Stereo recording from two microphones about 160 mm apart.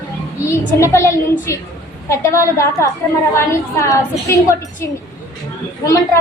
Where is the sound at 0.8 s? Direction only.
20° left (ahead or behind).